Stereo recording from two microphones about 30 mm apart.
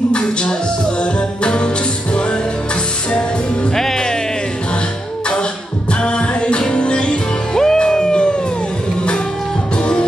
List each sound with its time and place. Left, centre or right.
0.1 s music: left
3.7 s music: centre
6.0 s music: left
7.5 s music: centre